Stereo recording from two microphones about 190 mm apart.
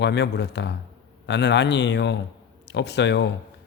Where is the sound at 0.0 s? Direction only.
65° left (ahead or behind).